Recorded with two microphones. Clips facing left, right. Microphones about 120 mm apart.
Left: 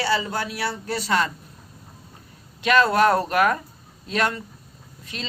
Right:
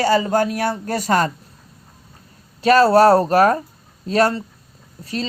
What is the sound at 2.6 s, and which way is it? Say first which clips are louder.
Speech: right 6 dB; 35° right (ahead or behind).